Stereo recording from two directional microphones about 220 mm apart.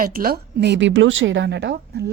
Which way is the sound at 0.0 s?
40° right (ahead or behind).